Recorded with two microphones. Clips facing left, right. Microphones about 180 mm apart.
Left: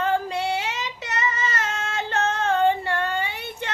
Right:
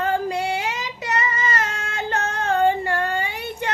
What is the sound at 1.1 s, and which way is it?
Child singing, 55° right (ahead or behind).